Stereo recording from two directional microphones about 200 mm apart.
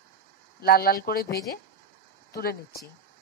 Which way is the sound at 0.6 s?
50° left (ahead or behind).